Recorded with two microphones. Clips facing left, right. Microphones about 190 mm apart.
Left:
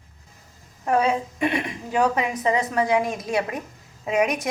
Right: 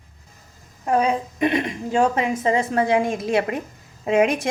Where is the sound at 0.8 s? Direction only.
15° right (ahead or behind).